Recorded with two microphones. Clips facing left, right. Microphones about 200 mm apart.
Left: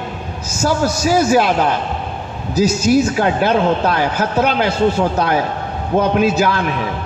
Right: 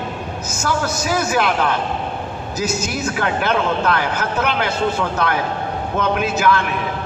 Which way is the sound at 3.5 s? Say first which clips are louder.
Left 3 dB; 35° left (ahead or behind).